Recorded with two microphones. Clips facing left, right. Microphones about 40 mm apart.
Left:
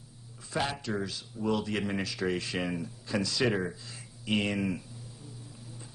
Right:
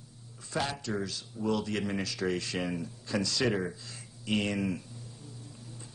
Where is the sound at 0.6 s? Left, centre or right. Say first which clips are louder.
Left 1 dB; centre.